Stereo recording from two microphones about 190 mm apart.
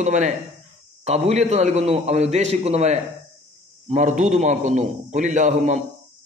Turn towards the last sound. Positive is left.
turn(degrees=-40)  # may be behind; listen again after turning